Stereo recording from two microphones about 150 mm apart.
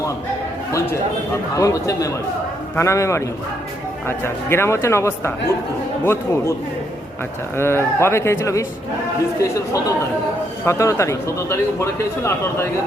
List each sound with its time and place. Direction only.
1.3 s speech: 20° left (ahead or behind)
7.5 s speech: 15° left (ahead or behind)